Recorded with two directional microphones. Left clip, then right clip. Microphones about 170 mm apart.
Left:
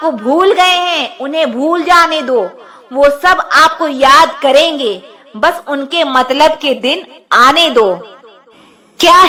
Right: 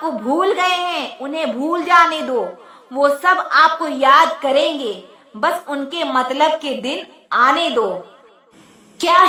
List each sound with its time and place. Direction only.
0.0 s a woman's voice: 25° left (ahead or behind)